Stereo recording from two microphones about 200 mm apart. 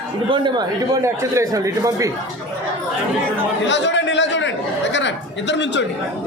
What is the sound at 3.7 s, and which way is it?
Chatter, 65° left (ahead or behind).